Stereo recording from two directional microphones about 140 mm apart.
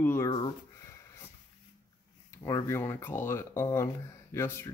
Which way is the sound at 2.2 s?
20° left (ahead or behind).